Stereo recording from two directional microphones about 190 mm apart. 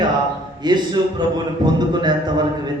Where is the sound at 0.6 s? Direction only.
25° right (ahead or behind).